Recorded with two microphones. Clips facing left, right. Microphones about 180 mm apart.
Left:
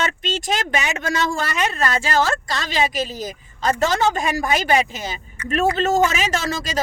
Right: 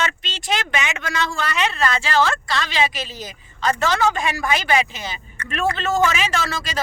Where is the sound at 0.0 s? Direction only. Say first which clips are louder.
Left 3 dB; 45° left (ahead or behind).